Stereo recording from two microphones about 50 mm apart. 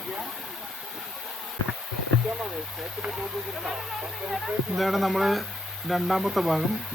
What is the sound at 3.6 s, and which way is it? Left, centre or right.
Speech, centre.